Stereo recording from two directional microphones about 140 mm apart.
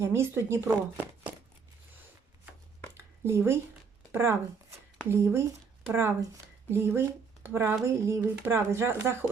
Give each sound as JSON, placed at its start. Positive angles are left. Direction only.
{"t": 0.0, "sound": "speech", "side_deg": -20}
{"t": 3.0, "sound": "a sound", "side_deg": -20}
{"t": 4.1, "sound": "speech", "side_deg": -15}